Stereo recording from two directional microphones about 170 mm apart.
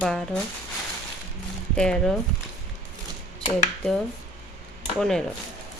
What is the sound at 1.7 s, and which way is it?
Speech, 5° left (ahead or behind).